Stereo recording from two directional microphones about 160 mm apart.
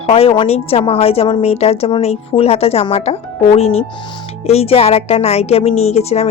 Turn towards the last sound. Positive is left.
turn(degrees=40)  # may be behind; listen again after turning